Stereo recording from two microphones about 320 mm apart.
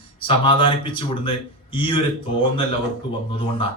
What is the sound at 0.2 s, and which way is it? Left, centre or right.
A man's voice, centre.